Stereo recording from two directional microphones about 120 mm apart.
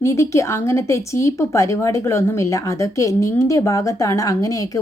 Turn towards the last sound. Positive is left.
turn(degrees=25)  # may be behind; listen again after turning